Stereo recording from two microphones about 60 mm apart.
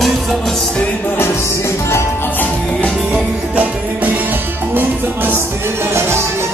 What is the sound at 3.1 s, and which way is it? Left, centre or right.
Music, right.